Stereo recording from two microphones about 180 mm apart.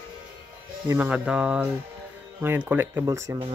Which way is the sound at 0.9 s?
10° right (ahead or behind).